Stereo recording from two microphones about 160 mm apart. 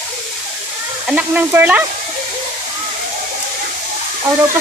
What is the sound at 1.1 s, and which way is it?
Speech, 10° right (ahead or behind).